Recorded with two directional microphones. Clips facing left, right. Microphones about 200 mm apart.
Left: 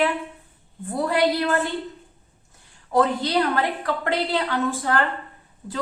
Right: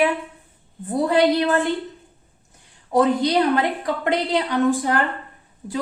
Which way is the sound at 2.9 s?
15° right (ahead or behind).